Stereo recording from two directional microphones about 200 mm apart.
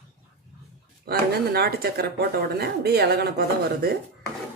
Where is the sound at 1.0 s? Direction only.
50° right (ahead or behind).